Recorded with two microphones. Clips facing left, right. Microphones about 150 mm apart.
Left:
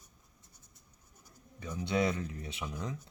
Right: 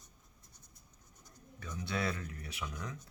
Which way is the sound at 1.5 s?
15° left (ahead or behind).